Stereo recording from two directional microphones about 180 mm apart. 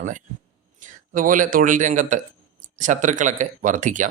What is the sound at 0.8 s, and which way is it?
A man's voice, 50° right (ahead or behind).